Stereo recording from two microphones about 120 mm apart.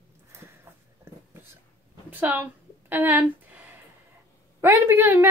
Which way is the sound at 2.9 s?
20° right (ahead or behind).